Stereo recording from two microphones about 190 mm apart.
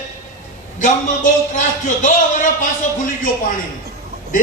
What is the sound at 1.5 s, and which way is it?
A man's voice, 45° left (ahead or behind).